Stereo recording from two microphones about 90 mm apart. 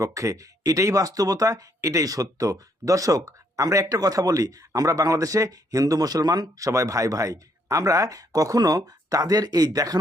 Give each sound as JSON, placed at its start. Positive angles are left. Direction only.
{"t": 0.0, "sound": "speech", "side_deg": -35}
{"t": 6.7, "sound": "speech", "side_deg": -35}